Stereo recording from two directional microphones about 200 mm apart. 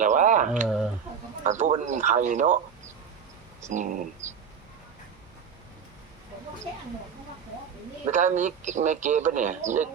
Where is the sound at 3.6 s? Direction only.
40° right (ahead or behind).